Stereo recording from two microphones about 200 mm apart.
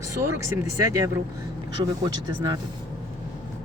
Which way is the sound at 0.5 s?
15° right (ahead or behind).